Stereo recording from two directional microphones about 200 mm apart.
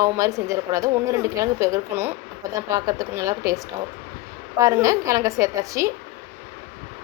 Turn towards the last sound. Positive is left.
turn(degrees=-15)  # may be behind; listen again after turning